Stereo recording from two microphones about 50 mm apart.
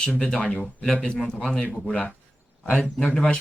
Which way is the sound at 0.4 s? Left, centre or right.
Left.